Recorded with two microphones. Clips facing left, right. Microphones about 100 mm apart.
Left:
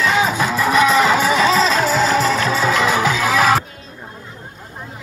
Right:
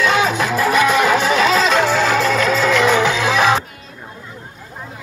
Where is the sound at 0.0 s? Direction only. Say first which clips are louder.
Right 1 dB; 30° left (ahead or behind).